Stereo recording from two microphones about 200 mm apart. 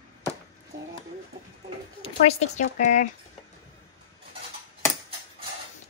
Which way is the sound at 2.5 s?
35° left (ahead or behind).